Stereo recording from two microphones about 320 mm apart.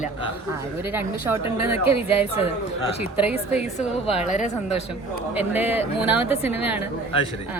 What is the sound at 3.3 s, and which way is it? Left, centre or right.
A woman's voice, centre.